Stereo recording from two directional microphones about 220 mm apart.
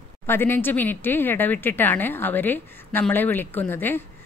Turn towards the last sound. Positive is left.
turn(degrees=10)  # may be behind; listen again after turning